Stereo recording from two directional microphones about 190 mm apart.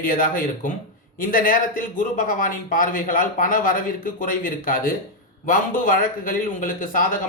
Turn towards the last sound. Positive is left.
turn(degrees=45)  # may be behind; listen again after turning